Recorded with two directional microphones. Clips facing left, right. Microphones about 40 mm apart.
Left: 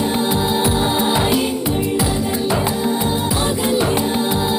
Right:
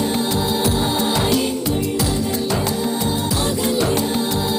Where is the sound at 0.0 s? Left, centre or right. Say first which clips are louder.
Left 2 dB; centre.